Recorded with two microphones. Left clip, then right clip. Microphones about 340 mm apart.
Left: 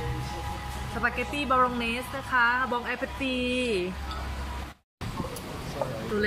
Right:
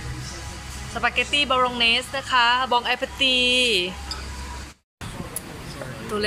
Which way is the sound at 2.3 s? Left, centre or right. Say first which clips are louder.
Right 5 dB; centre.